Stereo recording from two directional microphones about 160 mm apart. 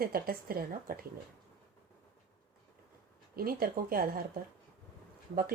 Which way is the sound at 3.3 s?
65° right (ahead or behind).